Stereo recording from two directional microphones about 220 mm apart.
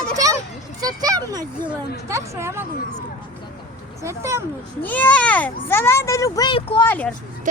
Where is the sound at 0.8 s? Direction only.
15° right (ahead or behind).